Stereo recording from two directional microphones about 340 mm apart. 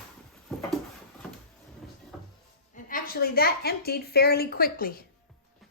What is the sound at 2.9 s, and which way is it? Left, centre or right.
A woman's voice, left.